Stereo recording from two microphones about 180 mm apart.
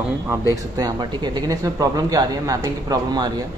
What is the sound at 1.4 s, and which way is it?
A man's voice, 20° right (ahead or behind).